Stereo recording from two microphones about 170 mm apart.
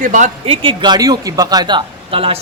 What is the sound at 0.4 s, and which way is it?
Speech, 35° right (ahead or behind).